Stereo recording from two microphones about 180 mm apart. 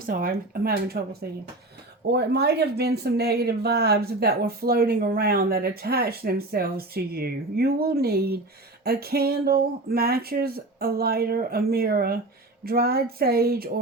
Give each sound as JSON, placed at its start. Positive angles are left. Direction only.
{"t": 0.0, "sound": "speech", "side_deg": -55}
{"t": 2.1, "sound": "speech", "side_deg": -65}